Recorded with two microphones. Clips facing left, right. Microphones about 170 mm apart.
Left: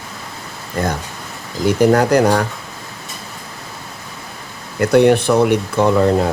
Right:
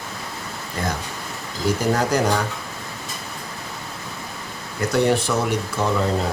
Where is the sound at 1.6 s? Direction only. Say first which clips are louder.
Left 8 dB; 65° left (ahead or behind).